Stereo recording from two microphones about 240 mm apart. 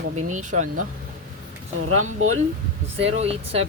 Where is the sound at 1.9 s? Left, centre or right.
Right.